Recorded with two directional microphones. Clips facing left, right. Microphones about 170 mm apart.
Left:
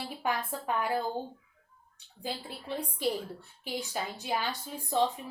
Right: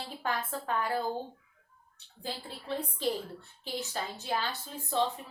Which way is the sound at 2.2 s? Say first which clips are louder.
Left 1 dB; 15° left (ahead or behind).